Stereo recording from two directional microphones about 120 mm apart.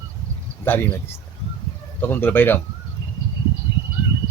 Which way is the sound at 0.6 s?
20° left (ahead or behind).